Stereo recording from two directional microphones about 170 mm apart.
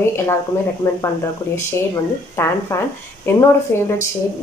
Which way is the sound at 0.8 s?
20° left (ahead or behind).